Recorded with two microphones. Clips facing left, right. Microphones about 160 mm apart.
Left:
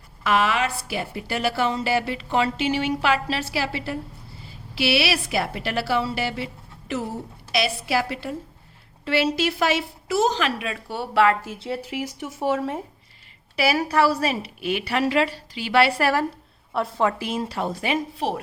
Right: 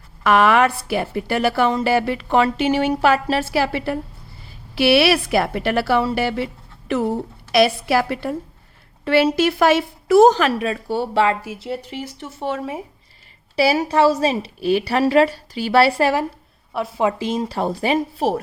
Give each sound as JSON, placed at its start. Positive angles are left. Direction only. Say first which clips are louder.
{"t": 0.2, "sound": "a woman's voice", "louder": "right 7 dB", "side_deg": -55}
{"t": 11.4, "sound": "speech", "louder": "right 2 dB", "side_deg": 0}
{"t": 13.6, "sound": "a woman's voice", "louder": "right 4 dB", "side_deg": -25}